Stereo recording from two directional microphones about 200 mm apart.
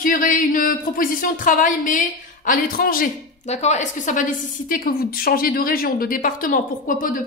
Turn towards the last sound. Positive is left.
turn(degrees=40)  # may be behind; listen again after turning